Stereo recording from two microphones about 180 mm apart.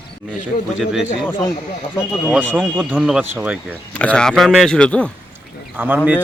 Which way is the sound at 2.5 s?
10° right (ahead or behind).